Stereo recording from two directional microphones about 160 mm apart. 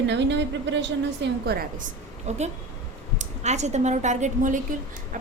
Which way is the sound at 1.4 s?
70° right (ahead or behind).